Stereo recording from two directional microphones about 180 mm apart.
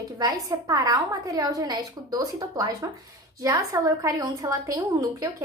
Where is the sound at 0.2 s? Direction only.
20° right (ahead or behind).